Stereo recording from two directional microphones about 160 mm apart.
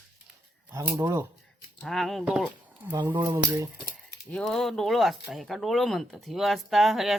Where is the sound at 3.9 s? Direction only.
5° left (ahead or behind).